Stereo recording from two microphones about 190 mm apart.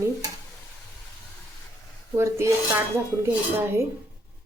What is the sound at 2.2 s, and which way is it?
Speech, 15° right (ahead or behind).